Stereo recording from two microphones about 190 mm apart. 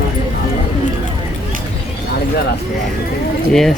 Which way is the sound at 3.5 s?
Centre (ahead or behind).